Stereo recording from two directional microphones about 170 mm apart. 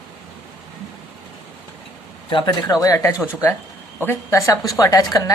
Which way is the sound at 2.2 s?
25° left (ahead or behind).